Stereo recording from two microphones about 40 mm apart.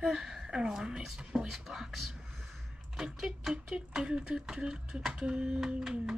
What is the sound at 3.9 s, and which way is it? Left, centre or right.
Speech, right.